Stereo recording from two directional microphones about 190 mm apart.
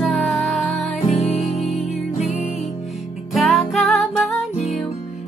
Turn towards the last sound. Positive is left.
turn(degrees=0)  # may be behind; listen again after turning